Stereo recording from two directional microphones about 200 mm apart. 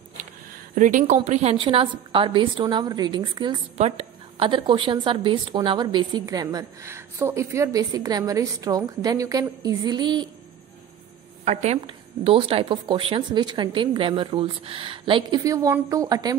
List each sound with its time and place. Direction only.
0.7 s a woman's voice: 40° right (ahead or behind); by 10.3 s 20° right (ahead or behind)
11.4 s a woman's voice: 35° right (ahead or behind)